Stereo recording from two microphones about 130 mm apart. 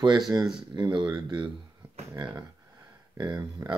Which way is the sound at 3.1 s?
30° right (ahead or behind).